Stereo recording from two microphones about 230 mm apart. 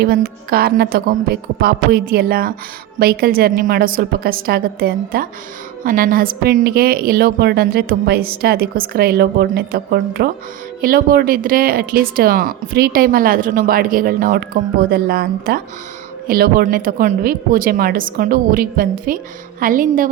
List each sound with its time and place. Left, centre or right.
0.0 s speech: right